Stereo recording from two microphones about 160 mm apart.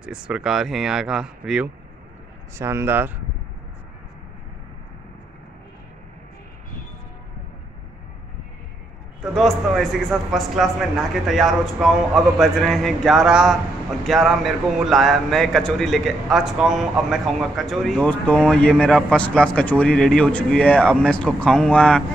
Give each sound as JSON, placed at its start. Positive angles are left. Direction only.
{"t": 0.0, "sound": "a man's voice", "side_deg": -5}
{"t": 2.5, "sound": "speech", "side_deg": -15}
{"t": 9.2, "sound": "a man's voice", "side_deg": 0}